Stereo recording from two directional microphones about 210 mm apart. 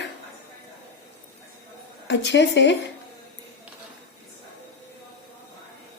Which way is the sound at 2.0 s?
55° left (ahead or behind).